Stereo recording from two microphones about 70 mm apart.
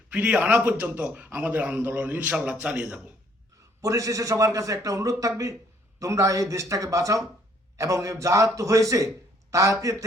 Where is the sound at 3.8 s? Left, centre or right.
Right.